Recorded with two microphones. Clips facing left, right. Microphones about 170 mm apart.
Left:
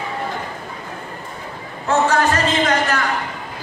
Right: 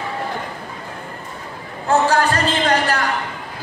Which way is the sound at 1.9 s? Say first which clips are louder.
Even; 35° right (ahead or behind).